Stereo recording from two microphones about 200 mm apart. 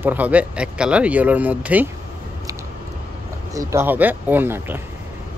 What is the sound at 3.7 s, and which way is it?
Speech, 10° right (ahead or behind).